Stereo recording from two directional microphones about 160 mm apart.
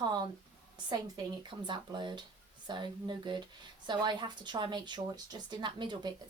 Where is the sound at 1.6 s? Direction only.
30° right (ahead or behind).